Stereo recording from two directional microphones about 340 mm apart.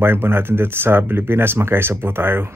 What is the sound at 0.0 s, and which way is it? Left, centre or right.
Speech, centre.